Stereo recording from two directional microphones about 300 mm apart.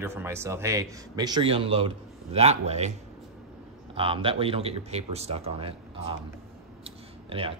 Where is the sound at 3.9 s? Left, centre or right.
Centre.